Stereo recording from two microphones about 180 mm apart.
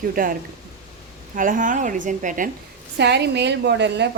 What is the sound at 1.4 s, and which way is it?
A woman's voice, 45° right (ahead or behind).